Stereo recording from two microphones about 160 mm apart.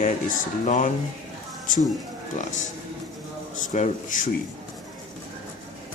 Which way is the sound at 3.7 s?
50° left (ahead or behind).